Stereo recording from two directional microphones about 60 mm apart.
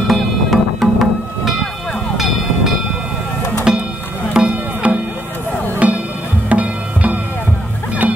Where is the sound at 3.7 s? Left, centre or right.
Centre.